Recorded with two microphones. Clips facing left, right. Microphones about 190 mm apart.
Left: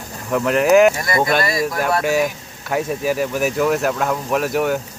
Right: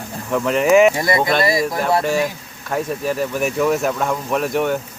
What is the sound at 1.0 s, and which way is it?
Speech, 25° right (ahead or behind).